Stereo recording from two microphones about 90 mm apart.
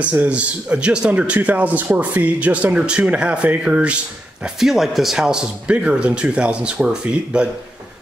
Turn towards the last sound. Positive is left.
turn(degrees=-10)  # may be behind; listen again after turning